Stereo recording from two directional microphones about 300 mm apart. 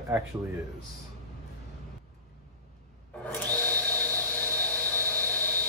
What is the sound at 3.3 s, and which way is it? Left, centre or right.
Wood, centre.